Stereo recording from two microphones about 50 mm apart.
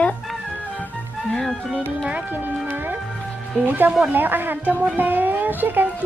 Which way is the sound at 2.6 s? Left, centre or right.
Right.